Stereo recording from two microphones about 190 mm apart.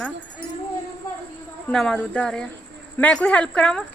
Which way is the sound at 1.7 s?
5° left (ahead or behind).